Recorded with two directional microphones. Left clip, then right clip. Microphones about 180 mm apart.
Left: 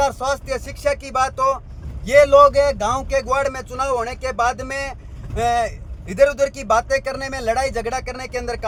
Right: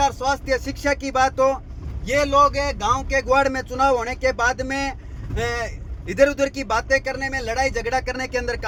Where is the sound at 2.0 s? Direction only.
20° left (ahead or behind).